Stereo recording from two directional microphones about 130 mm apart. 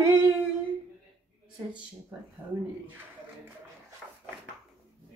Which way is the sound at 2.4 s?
15° right (ahead or behind).